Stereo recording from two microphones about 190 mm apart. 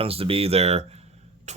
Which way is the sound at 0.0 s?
30° right (ahead or behind).